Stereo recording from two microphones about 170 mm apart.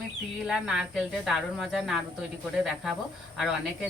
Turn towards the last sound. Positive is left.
turn(degrees=0)  # may be behind; listen again after turning